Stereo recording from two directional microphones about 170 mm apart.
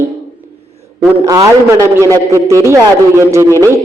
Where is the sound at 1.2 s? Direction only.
20° right (ahead or behind).